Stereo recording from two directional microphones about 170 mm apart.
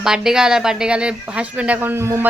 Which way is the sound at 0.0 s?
5° right (ahead or behind).